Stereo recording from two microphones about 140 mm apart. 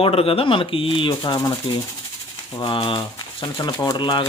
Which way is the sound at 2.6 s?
35° left (ahead or behind).